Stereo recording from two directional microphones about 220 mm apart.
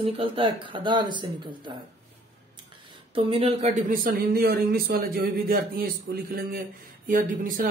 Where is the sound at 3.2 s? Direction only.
25° right (ahead or behind).